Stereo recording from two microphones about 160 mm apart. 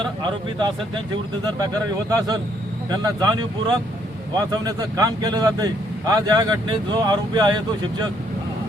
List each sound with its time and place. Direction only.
0.0 s speech: 30° right (ahead or behind)
2.0 s speech: 25° right (ahead or behind)